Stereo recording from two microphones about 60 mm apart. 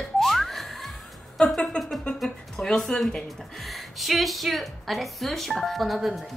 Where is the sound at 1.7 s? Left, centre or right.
Left.